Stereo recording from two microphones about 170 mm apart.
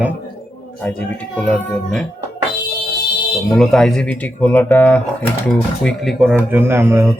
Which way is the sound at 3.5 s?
5° left (ahead or behind).